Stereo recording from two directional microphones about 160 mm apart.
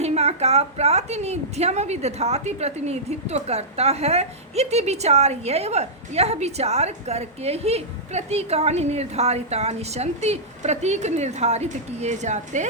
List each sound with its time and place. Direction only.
0.0 s a woman's voice: 40° right (ahead or behind)